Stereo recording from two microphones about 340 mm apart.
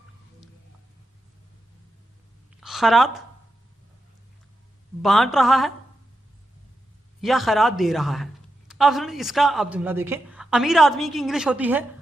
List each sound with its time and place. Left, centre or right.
2.6 s a woman's voice: centre
5.0 s a man's voice: centre
7.2 s a man's voice: centre